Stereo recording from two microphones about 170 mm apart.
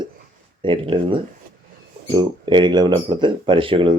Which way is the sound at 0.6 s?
30° right (ahead or behind).